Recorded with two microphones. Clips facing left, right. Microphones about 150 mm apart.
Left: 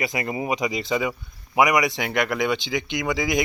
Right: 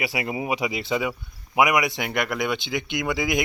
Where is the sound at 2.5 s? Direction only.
55° right (ahead or behind).